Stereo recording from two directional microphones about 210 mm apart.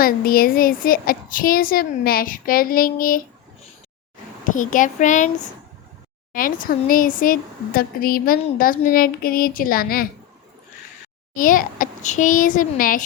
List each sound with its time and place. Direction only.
0.0 s speech: 45° left (ahead or behind)
4.4 s a child's voice: 40° left (ahead or behind)
6.3 s speech: 40° left (ahead or behind)
11.3 s a child's voice: 40° left (ahead or behind)